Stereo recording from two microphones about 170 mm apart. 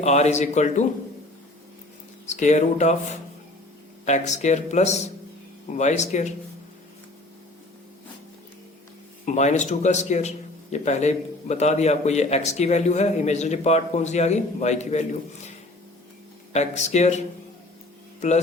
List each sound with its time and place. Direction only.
0.0 s a man's voice: 40° left (ahead or behind)
2.2 s speech: 45° left (ahead or behind)
9.2 s a man's voice: 45° left (ahead or behind)
16.5 s a man's voice: 40° left (ahead or behind)